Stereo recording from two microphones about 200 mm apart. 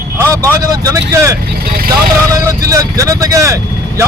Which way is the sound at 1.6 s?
50° right (ahead or behind).